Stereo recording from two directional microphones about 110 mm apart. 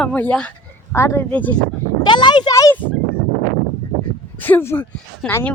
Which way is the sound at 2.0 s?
45° left (ahead or behind).